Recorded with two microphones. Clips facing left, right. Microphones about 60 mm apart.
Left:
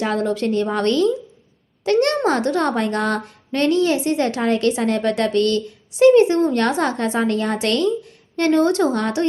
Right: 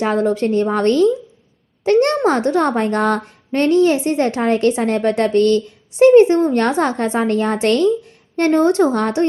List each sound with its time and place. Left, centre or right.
0.0 s a woman's voice: right